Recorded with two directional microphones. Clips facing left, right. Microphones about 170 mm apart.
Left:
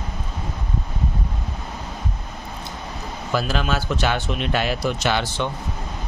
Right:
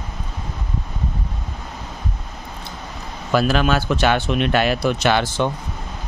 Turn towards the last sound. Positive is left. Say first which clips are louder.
# right 4 dB
turn(degrees=-55)  # may be behind; listen again after turning